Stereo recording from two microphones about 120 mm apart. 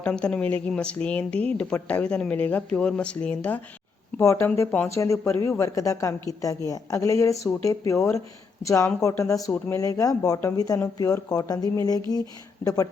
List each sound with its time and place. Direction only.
0.0 s speech: 5° left (ahead or behind); by 12.9 s 25° left (ahead or behind)